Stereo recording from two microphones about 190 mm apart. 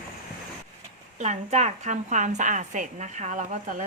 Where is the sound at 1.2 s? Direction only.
35° right (ahead or behind).